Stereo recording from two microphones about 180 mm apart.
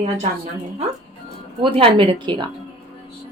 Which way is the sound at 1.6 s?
30° right (ahead or behind).